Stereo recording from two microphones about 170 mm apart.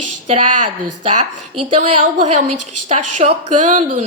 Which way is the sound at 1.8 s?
50° right (ahead or behind).